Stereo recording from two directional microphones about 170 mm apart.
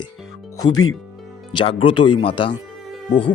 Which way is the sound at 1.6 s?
30° left (ahead or behind).